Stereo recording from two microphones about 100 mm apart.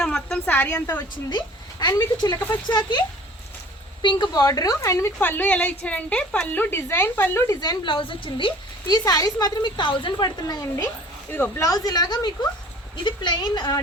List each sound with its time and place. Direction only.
0.0 s a sound: 5° left (ahead or behind)
0.4 s a woman's voice: 15° left (ahead or behind)
1.3 s speech: 45° left (ahead or behind)
4.0 s a woman's voice: 50° left (ahead or behind); by 7.6 s 30° left (ahead or behind)
7.6 s a woman's voice: 50° left (ahead or behind)
8.9 s speech: 40° left (ahead or behind)
11.3 s a woman's voice: 20° left (ahead or behind)
11.6 s speech: 40° left (ahead or behind)